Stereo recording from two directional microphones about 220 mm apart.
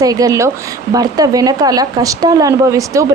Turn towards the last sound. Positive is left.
turn(degrees=-15)  # may be behind; listen again after turning